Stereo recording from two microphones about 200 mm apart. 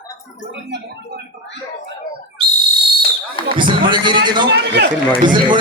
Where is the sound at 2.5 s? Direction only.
55° right (ahead or behind).